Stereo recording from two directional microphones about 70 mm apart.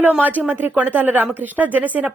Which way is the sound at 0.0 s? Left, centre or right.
Right.